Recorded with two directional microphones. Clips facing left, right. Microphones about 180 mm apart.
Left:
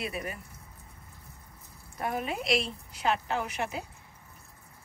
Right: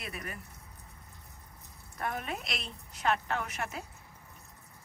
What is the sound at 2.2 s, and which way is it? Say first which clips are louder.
Speech: left 9 dB; centre (ahead or behind).